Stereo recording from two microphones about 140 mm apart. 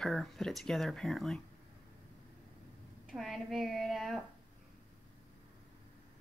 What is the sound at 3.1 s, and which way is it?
Speech, centre (ahead or behind).